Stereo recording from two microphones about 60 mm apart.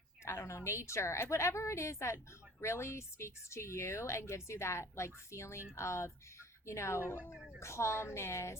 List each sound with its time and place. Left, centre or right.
0.3 s a woman's voice: left